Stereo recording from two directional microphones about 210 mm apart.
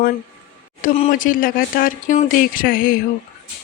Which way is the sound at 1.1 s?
40° left (ahead or behind).